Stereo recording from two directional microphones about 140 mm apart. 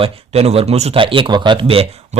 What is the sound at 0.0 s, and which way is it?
Speech, 45° right (ahead or behind).